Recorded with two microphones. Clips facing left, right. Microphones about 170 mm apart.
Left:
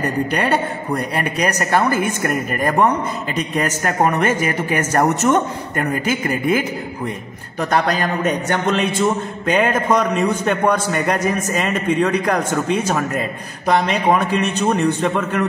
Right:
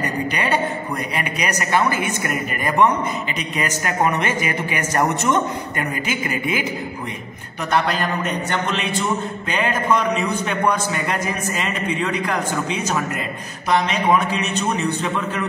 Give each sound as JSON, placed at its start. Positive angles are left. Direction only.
{"t": 0.4, "sound": "speech", "side_deg": 40}
{"t": 7.7, "sound": "a man's voice", "side_deg": 45}
{"t": 14.8, "sound": "a man's voice", "side_deg": 55}